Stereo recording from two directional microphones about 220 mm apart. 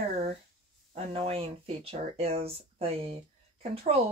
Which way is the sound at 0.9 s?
25° right (ahead or behind).